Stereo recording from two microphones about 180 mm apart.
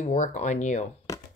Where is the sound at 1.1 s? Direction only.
15° left (ahead or behind).